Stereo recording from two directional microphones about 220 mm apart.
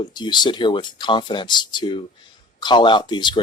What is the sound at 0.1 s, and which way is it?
Speech, 20° left (ahead or behind).